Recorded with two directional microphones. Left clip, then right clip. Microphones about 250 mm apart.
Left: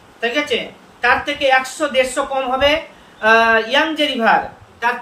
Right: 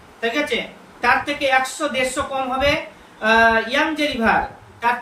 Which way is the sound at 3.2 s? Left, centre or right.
Centre.